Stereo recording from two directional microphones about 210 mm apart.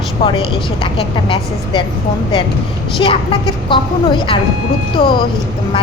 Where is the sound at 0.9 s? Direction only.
25° left (ahead or behind).